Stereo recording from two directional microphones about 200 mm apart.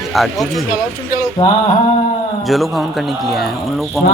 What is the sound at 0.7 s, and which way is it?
Speech, 45° left (ahead or behind).